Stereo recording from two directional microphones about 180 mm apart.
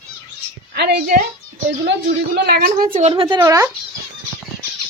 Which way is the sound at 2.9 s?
30° right (ahead or behind).